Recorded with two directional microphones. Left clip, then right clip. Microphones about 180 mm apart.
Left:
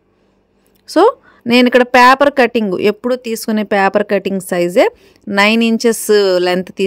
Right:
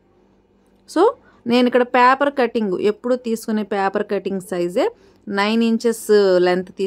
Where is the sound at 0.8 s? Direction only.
35° left (ahead or behind).